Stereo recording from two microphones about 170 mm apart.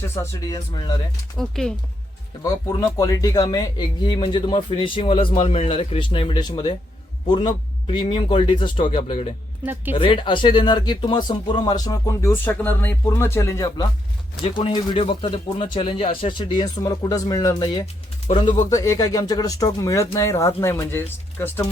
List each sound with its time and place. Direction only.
0.1 s speech: 15° left (ahead or behind)
1.4 s speech: centre (ahead or behind)
2.4 s a man's voice: 20° left (ahead or behind)